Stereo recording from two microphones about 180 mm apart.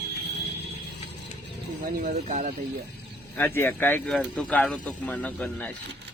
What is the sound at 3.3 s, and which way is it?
Speech, 15° left (ahead or behind).